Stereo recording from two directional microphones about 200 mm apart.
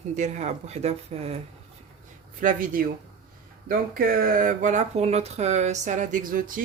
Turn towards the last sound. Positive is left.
turn(degrees=-45)  # may be behind; listen again after turning